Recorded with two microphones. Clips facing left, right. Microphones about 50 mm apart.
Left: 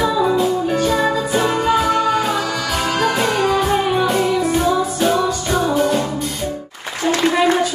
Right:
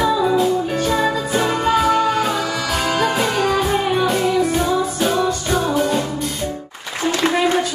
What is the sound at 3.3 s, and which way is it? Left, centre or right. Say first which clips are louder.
Music: left 1 dB; centre.